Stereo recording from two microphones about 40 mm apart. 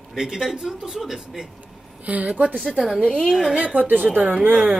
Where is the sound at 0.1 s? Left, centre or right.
Centre.